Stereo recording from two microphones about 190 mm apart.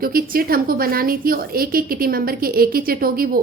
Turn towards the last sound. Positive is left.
turn(degrees=-50)  # may be behind; listen again after turning